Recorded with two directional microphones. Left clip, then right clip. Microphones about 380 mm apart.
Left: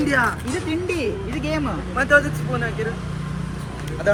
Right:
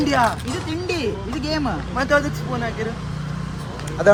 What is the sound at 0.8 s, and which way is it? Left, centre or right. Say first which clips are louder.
Speech: even; centre.